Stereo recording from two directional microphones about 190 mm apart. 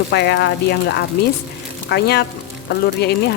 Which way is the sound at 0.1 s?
60° left (ahead or behind).